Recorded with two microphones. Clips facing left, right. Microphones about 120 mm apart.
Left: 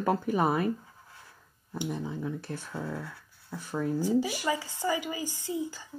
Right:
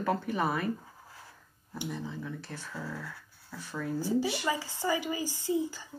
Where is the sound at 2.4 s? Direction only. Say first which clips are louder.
Left 4 dB; 55° left (ahead or behind).